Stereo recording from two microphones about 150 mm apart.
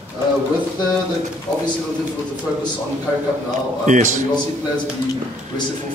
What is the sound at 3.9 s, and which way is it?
Speech, 55° right (ahead or behind).